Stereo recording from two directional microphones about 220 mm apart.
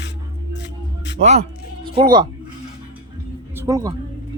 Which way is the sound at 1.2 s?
30° right (ahead or behind).